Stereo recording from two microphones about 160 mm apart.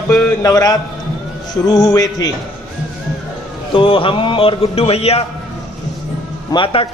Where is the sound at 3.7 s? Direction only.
35° left (ahead or behind).